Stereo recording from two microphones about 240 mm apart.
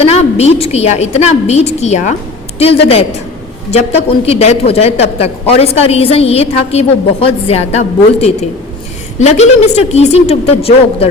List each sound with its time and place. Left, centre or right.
0.0 s a woman's voice: left